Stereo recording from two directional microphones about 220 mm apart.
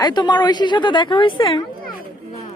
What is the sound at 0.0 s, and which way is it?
A woman's voice, 20° left (ahead or behind).